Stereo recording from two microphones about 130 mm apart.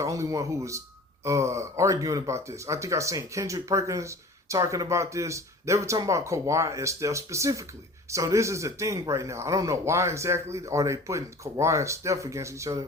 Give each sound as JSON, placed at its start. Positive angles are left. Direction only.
{"t": 0.0, "sound": "speech", "side_deg": -25}